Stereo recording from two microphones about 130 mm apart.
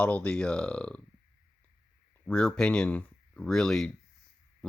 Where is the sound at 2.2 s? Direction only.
5° left (ahead or behind).